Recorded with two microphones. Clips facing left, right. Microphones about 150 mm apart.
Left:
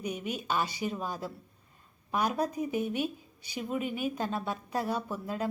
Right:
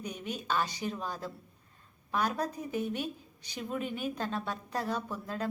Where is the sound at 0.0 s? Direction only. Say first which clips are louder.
Left 3 dB; 10° left (ahead or behind).